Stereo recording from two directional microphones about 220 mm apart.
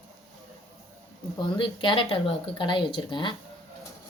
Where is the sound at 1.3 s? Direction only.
20° left (ahead or behind).